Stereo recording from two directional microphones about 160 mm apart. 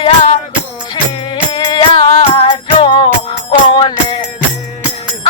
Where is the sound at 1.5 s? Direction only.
25° left (ahead or behind).